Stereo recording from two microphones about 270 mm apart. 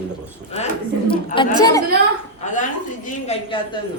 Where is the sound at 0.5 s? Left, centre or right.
Left.